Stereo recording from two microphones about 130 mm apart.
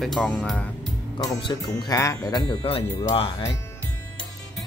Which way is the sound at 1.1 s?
30° left (ahead or behind).